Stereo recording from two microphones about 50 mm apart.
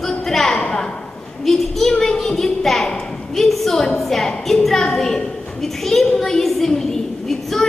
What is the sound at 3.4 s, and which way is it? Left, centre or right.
A woman's voice, centre.